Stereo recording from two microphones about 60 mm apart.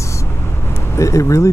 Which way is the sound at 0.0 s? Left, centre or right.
Left.